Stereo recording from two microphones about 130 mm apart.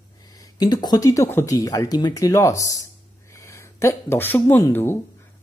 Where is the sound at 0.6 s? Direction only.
30° left (ahead or behind).